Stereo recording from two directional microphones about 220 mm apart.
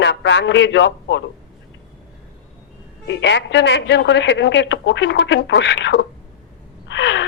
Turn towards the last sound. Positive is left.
turn(degrees=55)  # may be behind; listen again after turning